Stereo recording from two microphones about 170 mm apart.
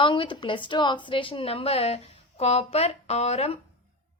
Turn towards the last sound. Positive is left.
turn(degrees=40)  # may be behind; listen again after turning